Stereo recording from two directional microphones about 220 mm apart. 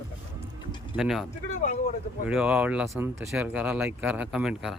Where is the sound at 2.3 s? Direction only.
5° right (ahead or behind).